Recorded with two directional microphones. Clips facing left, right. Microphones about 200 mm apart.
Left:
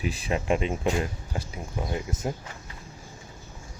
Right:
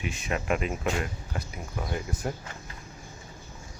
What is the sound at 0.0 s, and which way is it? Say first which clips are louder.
Speech: left 3 dB; 35° left (ahead or behind).